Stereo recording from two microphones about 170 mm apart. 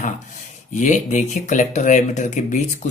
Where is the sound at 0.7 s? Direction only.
45° left (ahead or behind).